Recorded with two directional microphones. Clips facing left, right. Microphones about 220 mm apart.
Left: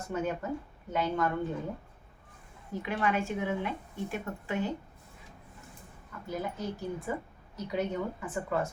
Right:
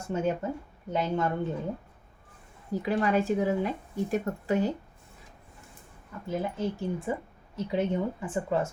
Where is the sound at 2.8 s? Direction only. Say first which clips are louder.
Right 5 dB; 35° right (ahead or behind).